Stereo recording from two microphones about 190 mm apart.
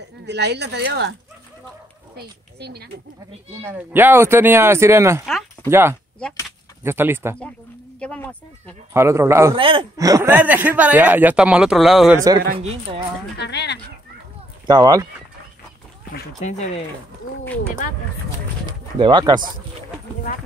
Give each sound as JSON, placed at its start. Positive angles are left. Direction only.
{"t": 0.2, "sound": "speech", "side_deg": -65}
{"t": 2.1, "sound": "speech", "side_deg": -60}
{"t": 3.6, "sound": "speech", "side_deg": -10}
{"t": 8.0, "sound": "speech", "side_deg": 5}
{"t": 8.9, "sound": "speech", "side_deg": -15}
{"t": 9.6, "sound": "speech", "side_deg": -25}
{"t": 12.2, "sound": "speech", "side_deg": -20}
{"t": 13.4, "sound": "speech", "side_deg": 65}
{"t": 14.7, "sound": "speech", "side_deg": -20}
{"t": 16.3, "sound": "speech", "side_deg": 40}
{"t": 18.7, "sound": "speech", "side_deg": -25}